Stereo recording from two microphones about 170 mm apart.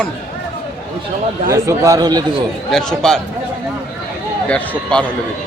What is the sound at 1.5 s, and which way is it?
Speech, 20° right (ahead or behind).